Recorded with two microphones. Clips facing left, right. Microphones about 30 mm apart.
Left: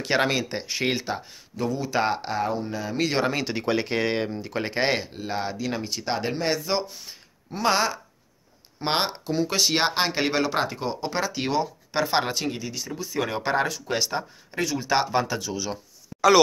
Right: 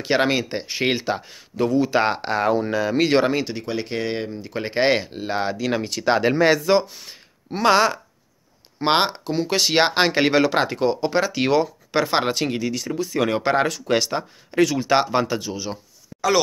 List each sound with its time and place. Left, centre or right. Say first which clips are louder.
0.0 s speech: right 3 dB; right
1.0 s speech: right 5 dB; right
2.4 s speech: right 8 dB; right
3.0 s speech: right 6 dB; right
3.5 s speech: left 2 dB; centre
4.6 s speech: right 6 dB; right
5.1 s speech: right 5 dB; right
5.6 s speech: right 5 dB; right
13.7 s speech: right 6 dB; right
14.6 s speech: right 8 dB; right
14.9 s speech: right 4 dB; right